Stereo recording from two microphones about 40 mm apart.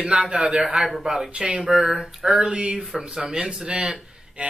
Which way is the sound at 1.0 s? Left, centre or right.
Centre.